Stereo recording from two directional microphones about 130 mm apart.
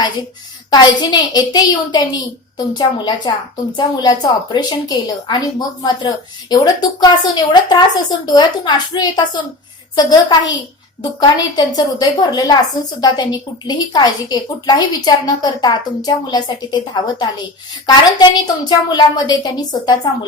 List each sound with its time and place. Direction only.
0.7 s a woman's voice: 30° left (ahead or behind)